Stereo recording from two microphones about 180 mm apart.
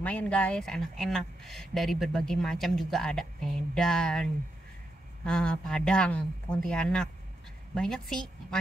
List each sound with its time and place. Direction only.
0.0 s speech: 10° left (ahead or behind)